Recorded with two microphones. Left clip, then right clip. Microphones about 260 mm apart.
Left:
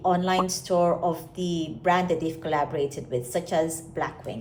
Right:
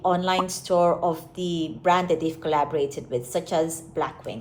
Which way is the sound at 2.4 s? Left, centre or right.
Centre.